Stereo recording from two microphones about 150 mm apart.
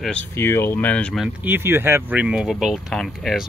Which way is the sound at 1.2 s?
15° right (ahead or behind).